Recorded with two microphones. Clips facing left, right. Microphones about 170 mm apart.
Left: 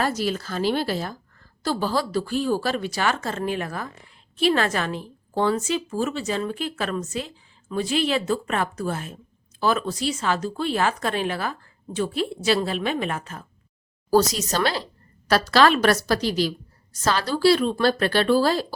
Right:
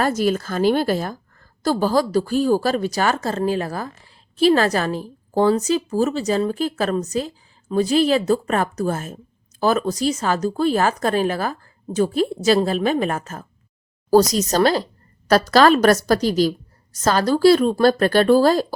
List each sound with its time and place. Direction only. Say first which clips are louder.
0.0 s a woman's voice: right 5 dB; 50° right (ahead or behind)